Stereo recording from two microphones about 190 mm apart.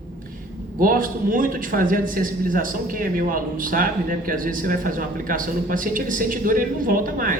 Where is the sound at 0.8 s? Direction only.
45° right (ahead or behind).